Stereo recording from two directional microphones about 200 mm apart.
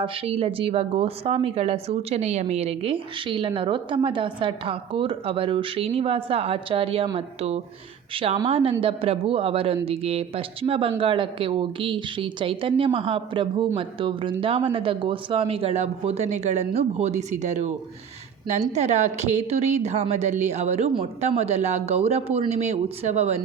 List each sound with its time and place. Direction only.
0.0 s a woman's voice: 30° right (ahead or behind)
18.7 s speech: 35° right (ahead or behind)